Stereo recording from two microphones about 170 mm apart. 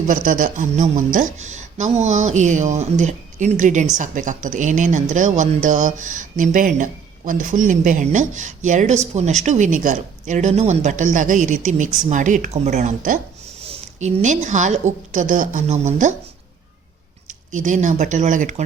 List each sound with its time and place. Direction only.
0.1 s a woman's voice: 55° right (ahead or behind)
17.2 s speech: 45° right (ahead or behind)